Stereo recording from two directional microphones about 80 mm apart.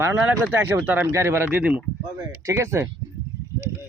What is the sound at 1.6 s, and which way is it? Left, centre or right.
Speech, centre.